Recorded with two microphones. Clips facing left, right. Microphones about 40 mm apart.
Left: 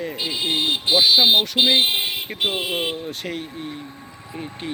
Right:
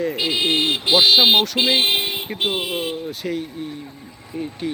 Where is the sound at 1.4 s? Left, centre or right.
Right.